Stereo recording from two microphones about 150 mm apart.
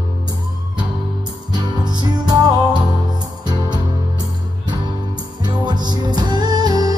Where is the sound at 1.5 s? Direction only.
30° right (ahead or behind).